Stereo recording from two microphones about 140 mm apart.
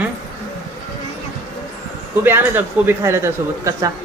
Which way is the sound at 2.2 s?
15° right (ahead or behind).